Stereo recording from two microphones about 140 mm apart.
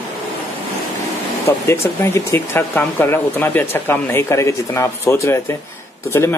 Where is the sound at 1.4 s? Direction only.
20° left (ahead or behind).